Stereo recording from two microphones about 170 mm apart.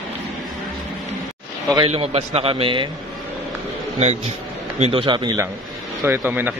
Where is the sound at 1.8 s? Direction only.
35° right (ahead or behind).